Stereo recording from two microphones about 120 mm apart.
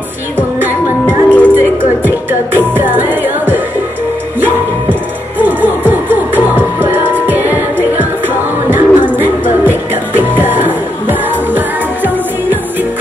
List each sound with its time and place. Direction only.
0.4 s music: 15° right (ahead or behind)
1.0 s music: 10° left (ahead or behind)
2.0 s music: 15° right (ahead or behind)
5.4 s music: 15° right (ahead or behind)